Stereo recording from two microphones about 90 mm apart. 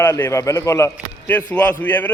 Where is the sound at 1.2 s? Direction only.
20° left (ahead or behind).